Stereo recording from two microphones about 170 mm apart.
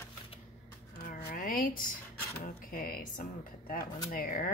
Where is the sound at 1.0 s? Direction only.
55° left (ahead or behind).